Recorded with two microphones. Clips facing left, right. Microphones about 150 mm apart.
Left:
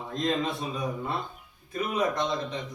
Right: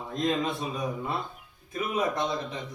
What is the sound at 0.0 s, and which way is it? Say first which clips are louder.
A man's voice: even; 5° right (ahead or behind).